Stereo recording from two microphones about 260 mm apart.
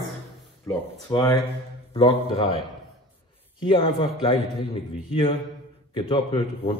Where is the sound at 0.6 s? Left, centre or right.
Centre.